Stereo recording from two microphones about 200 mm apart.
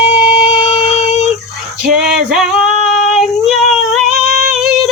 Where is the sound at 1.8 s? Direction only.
5° right (ahead or behind).